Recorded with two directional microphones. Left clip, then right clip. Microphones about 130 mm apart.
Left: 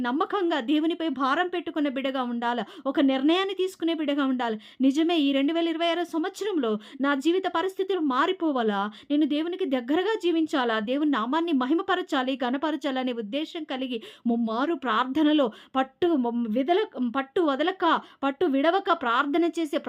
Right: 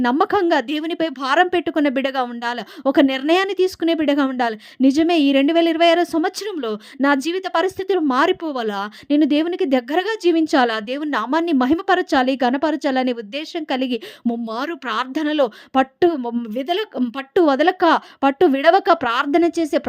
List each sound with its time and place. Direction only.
0.0 s speech: 55° right (ahead or behind)
14.7 s speech: 45° right (ahead or behind)